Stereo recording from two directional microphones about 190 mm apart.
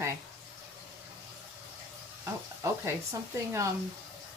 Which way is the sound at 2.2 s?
15° right (ahead or behind).